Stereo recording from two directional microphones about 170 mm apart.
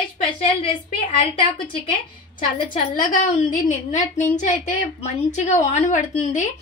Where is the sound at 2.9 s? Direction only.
55° left (ahead or behind).